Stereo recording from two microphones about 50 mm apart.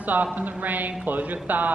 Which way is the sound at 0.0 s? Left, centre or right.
Right.